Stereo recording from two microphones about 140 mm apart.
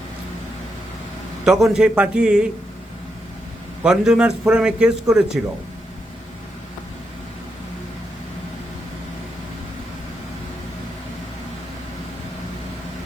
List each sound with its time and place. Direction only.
1.5 s a man's voice: 5° right (ahead or behind)
3.8 s a man's voice: 5° right (ahead or behind)